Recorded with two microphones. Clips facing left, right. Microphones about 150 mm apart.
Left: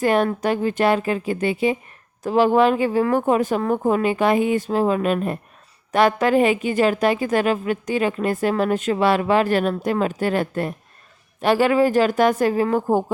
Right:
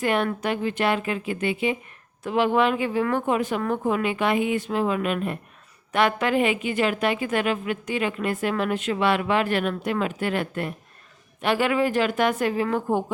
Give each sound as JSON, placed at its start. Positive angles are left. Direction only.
{"t": 0.0, "sound": "a woman's voice", "side_deg": 40}